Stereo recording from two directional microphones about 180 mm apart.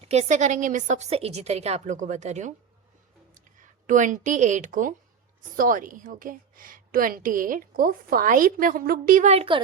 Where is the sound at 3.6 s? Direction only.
45° right (ahead or behind).